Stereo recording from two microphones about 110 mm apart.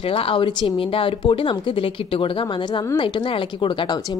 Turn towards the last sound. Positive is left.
turn(degrees=50)  # may be behind; listen again after turning